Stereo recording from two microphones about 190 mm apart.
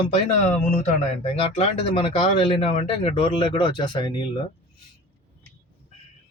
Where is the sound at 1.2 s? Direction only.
30° left (ahead or behind).